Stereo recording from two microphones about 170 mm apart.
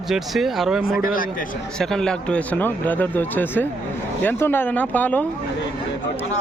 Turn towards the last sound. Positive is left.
turn(degrees=10)  # may be behind; listen again after turning